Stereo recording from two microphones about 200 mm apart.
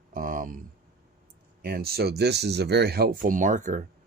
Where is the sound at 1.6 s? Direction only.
50° right (ahead or behind).